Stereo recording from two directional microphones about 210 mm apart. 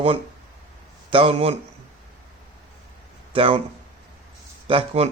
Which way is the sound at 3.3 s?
25° right (ahead or behind).